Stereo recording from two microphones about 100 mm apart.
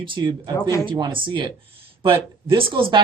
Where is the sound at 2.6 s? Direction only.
60° right (ahead or behind).